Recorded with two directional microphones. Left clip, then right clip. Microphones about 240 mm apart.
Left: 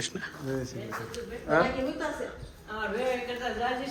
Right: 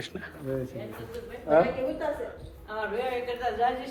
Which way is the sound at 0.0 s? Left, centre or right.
Centre.